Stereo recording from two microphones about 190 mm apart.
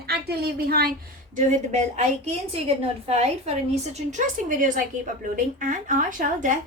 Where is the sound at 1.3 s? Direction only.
40° right (ahead or behind).